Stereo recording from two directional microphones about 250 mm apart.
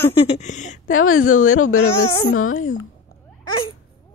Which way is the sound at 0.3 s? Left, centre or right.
Left.